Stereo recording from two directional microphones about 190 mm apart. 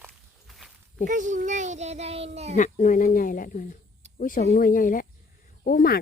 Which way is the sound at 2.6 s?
40° left (ahead or behind).